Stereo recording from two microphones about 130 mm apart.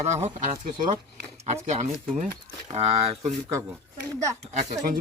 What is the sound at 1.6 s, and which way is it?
Speech, 65° right (ahead or behind).